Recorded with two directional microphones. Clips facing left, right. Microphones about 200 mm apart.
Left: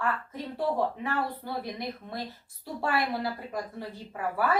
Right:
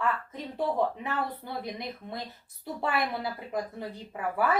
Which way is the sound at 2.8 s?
20° right (ahead or behind).